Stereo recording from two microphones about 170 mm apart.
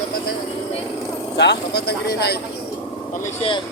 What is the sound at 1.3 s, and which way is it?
Speech, 85° left.